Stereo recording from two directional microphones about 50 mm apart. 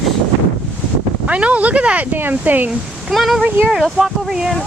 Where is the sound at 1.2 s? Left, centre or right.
Right.